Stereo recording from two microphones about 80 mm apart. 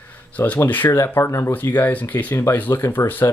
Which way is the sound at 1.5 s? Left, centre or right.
Left.